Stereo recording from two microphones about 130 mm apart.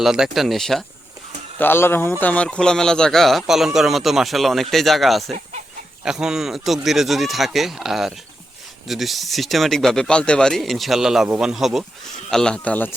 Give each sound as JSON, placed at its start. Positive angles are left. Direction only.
{"t": 0.0, "sound": "a man's voice", "side_deg": -5}
{"t": 1.5, "sound": "a man's voice", "side_deg": 15}